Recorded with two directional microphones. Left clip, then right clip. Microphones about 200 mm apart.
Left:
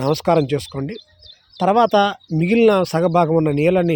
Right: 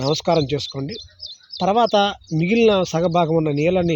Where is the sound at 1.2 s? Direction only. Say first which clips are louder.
Right 8 dB; 75° left (ahead or behind).